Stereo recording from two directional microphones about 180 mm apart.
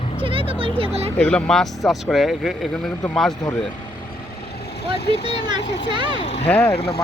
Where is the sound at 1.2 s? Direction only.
5° left (ahead or behind).